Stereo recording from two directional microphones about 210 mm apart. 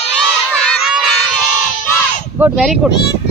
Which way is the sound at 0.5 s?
Centre (ahead or behind).